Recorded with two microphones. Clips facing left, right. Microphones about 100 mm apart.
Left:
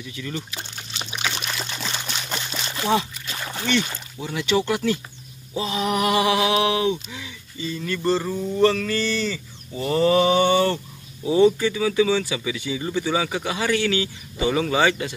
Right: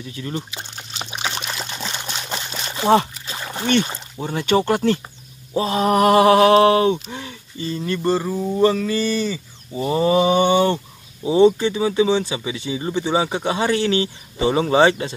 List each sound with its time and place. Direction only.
0.0 s speech: 35° right (ahead or behind)
0.4 s speech: 20° right (ahead or behind)
0.9 s trickle: 30° right (ahead or behind)
3.6 s a sound: 45° right (ahead or behind)
7.7 s speech: 30° right (ahead or behind)
8.0 s speech: 10° right (ahead or behind); by 15.1 s 30° right (ahead or behind)